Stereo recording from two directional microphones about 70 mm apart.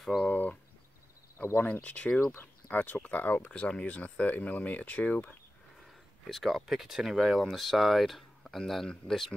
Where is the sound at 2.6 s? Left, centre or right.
Left.